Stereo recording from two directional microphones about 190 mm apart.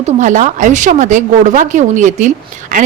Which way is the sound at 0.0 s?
40° right (ahead or behind).